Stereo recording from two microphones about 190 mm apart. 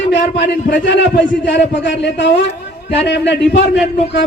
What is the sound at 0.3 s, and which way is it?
A man's voice, 65° left (ahead or behind).